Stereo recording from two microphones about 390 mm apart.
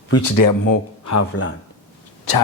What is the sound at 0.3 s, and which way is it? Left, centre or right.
Speech, left.